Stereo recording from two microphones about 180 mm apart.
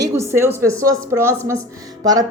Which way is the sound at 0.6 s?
15° right (ahead or behind).